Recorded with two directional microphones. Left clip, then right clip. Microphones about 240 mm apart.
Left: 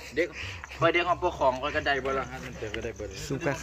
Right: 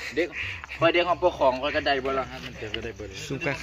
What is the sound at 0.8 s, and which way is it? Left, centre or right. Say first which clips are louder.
Speech: right 3 dB; right.